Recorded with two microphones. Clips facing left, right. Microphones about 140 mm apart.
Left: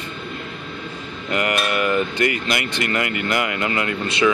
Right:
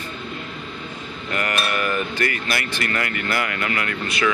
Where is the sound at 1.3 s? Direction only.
20° left (ahead or behind).